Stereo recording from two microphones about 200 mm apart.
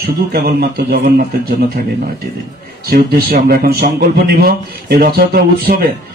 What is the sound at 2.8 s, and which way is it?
Speech, 50° right (ahead or behind).